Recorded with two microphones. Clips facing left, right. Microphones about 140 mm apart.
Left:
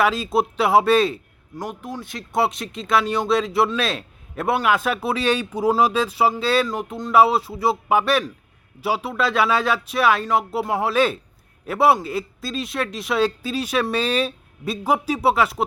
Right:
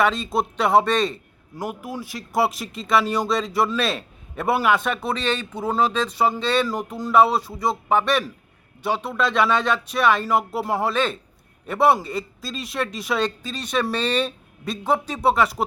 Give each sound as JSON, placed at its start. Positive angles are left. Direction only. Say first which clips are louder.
{"t": 0.0, "sound": "speech", "louder": "left 1 dB", "side_deg": 5}
{"t": 1.5, "sound": "speech", "louder": "right 1 dB", "side_deg": -5}